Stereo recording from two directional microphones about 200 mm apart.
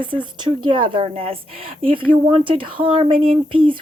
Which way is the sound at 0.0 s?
25° right (ahead or behind).